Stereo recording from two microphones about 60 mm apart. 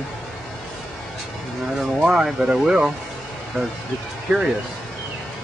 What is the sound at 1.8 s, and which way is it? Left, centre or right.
Speech, centre.